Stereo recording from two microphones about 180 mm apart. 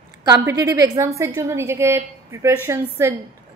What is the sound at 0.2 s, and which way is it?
A woman's voice, 20° right (ahead or behind).